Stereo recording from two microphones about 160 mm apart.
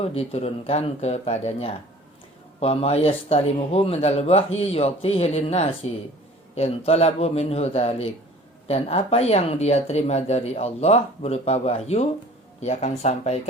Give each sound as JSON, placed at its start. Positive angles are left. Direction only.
{"t": 0.0, "sound": "speech", "side_deg": 40}